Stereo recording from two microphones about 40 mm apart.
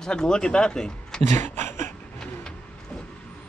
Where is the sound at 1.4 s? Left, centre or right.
Left.